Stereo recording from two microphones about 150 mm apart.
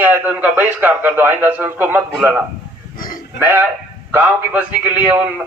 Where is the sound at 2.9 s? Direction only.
70° left (ahead or behind).